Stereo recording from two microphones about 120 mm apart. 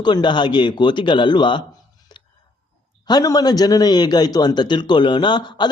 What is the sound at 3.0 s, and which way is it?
A man's voice, 35° left (ahead or behind).